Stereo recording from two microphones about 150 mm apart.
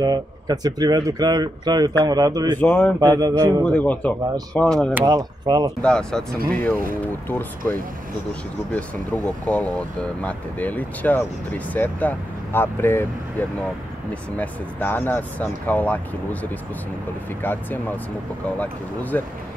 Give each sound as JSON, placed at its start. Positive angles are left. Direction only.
{"t": 0.0, "sound": "speech", "side_deg": -25}
{"t": 2.6, "sound": "speech", "side_deg": 10}
{"t": 3.0, "sound": "speech", "side_deg": -25}
{"t": 3.6, "sound": "speech", "side_deg": 10}
{"t": 5.0, "sound": "speech", "side_deg": -25}
{"t": 5.8, "sound": "speech", "side_deg": 5}
{"t": 6.3, "sound": "speech", "side_deg": -75}
{"t": 7.2, "sound": "speech", "side_deg": 15}